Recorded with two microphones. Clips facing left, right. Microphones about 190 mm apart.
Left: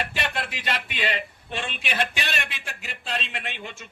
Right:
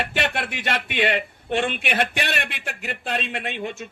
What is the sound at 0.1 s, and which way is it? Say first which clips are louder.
A man's voice: right 5 dB; 65° right (ahead or behind).